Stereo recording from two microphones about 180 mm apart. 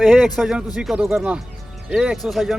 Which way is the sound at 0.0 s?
Centre (ahead or behind).